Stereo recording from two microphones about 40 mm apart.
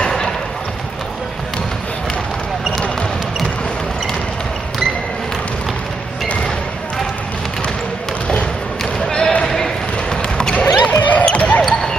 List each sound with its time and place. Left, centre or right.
9.0 s basketball bounce: centre
10.3 s basketball bounce: left
10.6 s a sound: left
11.3 s basketball bounce: left